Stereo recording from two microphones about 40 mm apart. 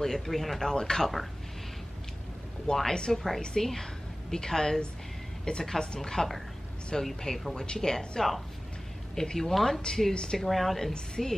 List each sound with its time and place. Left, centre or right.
0.0 s speech: centre
0.6 s a woman's voice: centre
2.7 s a woman's voice: left; by 7.5 s centre
7.5 s a woman's voice: centre
10.1 s speech: left
10.4 s a woman's voice: centre